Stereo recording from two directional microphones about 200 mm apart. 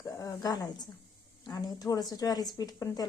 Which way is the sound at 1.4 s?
20° left (ahead or behind).